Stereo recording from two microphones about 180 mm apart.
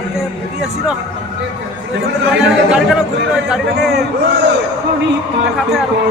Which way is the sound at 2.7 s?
5° right (ahead or behind).